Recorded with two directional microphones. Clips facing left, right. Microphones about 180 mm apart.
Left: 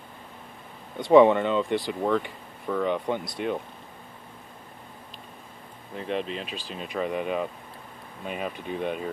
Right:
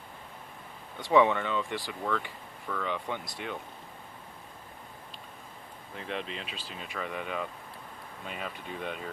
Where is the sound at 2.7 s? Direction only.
35° left (ahead or behind).